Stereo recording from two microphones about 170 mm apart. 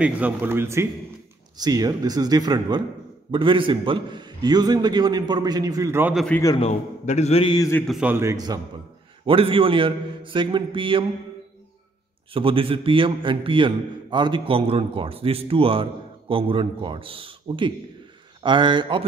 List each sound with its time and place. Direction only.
0.0 s a man's voice: 10° right (ahead or behind)
6.1 s a man's voice: 5° left (ahead or behind)
6.6 s a man's voice: 40° left (ahead or behind)
7.5 s a man's voice: 20° left (ahead or behind)
7.8 s a man's voice: centre (ahead or behind)
8.1 s speech: 15° right (ahead or behind)
9.2 s a man's voice: 30° right (ahead or behind)
12.3 s a man's voice: 30° right (ahead or behind)